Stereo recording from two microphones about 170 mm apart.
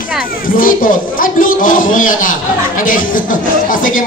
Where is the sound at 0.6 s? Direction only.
55° left (ahead or behind).